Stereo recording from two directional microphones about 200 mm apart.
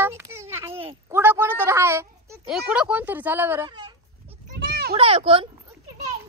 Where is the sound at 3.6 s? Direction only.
25° right (ahead or behind).